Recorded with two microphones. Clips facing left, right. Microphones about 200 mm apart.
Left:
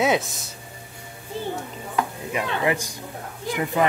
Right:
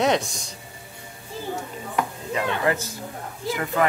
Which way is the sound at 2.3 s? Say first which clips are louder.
Even; 15° left (ahead or behind).